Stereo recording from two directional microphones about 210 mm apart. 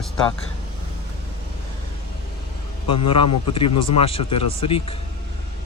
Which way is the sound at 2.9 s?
25° left (ahead or behind).